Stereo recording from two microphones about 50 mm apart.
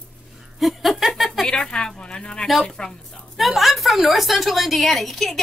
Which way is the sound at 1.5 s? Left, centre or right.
Centre.